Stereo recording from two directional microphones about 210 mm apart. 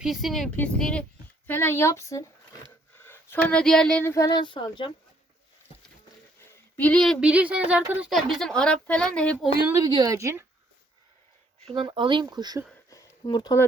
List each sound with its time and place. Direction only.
0.0 s a woman's voice: centre (ahead or behind); by 4.9 s 20° left (ahead or behind)
6.7 s a woman's voice: 5° left (ahead or behind)
9.6 s a woman's voice: 15° right (ahead or behind)
11.7 s speech: 25° right (ahead or behind)
12.9 s a sound: 20° left (ahead or behind)